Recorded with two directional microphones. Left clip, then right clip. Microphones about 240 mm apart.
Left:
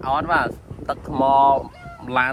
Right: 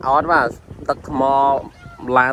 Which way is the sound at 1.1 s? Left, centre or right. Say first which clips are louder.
Even; left.